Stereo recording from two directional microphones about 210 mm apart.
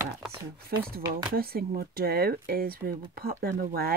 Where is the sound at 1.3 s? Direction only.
45° right (ahead or behind).